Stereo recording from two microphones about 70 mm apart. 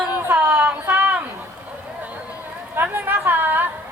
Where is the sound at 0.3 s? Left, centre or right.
Right.